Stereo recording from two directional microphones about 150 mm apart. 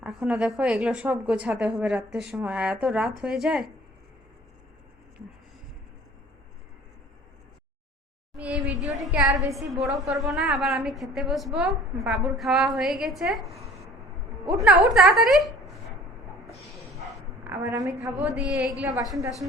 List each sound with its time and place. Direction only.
0.0 s a woman's voice: 5° right (ahead or behind)
8.4 s a woman's voice: 10° right (ahead or behind)
14.8 s a woman's voice: centre (ahead or behind)
17.6 s a woman's voice: 20° right (ahead or behind); by 19.2 s 5° right (ahead or behind)